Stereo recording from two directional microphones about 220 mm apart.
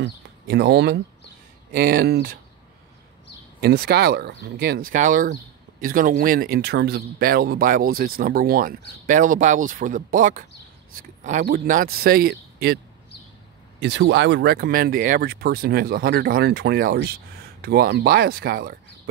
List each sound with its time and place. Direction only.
0.0 s speech: 50° right (ahead or behind)
3.6 s speech: 45° right (ahead or behind)
13.7 s speech: 55° right (ahead or behind)